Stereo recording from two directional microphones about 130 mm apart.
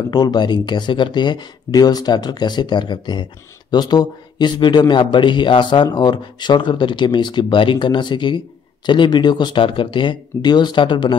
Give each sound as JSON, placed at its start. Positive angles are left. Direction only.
{"t": 0.1, "sound": "a man's voice", "side_deg": 30}